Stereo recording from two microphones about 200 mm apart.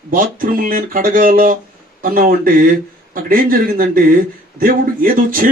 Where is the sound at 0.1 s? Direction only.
45° right (ahead or behind).